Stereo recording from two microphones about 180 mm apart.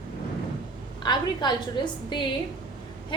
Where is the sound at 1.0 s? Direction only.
25° left (ahead or behind).